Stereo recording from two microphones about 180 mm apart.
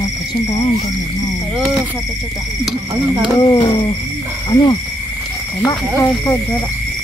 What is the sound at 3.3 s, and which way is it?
Speech, 25° left (ahead or behind).